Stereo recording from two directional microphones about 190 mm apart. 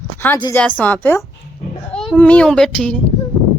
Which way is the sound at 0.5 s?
10° left (ahead or behind).